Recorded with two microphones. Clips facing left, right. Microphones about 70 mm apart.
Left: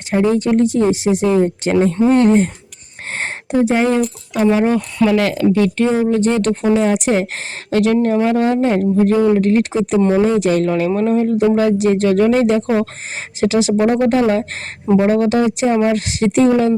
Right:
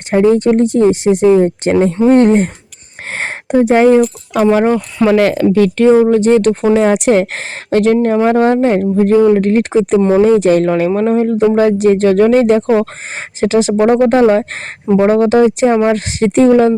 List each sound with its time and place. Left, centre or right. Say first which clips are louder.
0.1 s speech: right 5 dB; right
3.1 s a sound: right 4 dB; right
5.0 s speech: right 5 dB; right
5.5 s speech: right 7 dB; right